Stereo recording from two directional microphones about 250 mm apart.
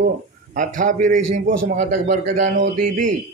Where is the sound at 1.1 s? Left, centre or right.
Right.